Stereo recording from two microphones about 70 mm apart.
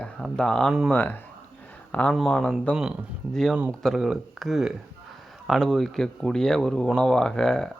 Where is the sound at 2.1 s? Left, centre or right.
Centre.